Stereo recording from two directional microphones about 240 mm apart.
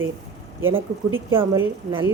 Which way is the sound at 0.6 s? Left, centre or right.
Right.